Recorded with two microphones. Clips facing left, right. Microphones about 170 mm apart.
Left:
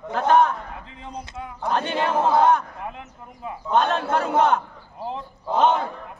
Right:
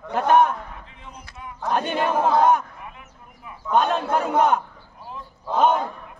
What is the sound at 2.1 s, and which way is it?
Speech, 5° left (ahead or behind).